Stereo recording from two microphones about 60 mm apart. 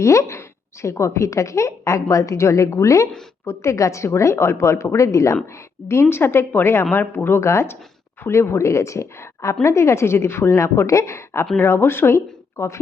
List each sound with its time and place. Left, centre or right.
0.0 s a woman's voice: left
3.4 s speech: left
5.9 s speech: left
11.6 s speech: left